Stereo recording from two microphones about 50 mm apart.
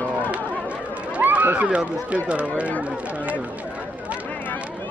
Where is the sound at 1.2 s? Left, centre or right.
Right.